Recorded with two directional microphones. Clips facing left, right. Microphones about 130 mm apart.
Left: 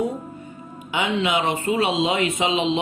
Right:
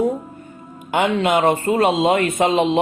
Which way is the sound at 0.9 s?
50° right (ahead or behind).